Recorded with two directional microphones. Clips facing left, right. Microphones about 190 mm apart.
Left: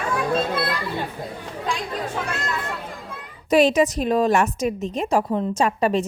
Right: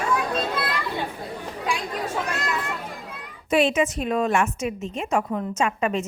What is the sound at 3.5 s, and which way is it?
A woman's voice, 40° left (ahead or behind).